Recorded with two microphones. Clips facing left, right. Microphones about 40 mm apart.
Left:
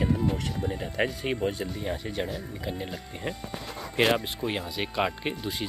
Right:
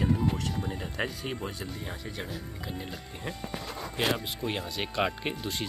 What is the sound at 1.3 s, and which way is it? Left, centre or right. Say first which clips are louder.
Speech: left 6 dB; left.